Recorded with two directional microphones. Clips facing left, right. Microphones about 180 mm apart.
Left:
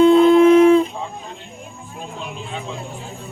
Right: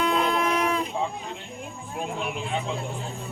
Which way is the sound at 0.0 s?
25° left (ahead or behind).